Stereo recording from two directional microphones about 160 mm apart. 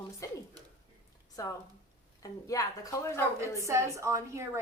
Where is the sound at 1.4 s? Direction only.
20° left (ahead or behind).